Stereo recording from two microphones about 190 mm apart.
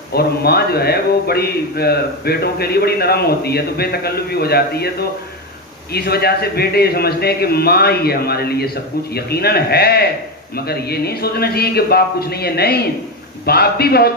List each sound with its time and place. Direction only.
0.1 s a man's voice: 55° left (ahead or behind)
5.9 s a man's voice: 55° left (ahead or behind)